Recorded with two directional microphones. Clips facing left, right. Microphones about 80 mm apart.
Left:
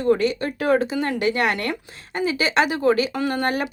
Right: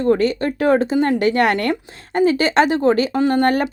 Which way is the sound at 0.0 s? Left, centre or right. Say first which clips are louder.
Right 3 dB; right.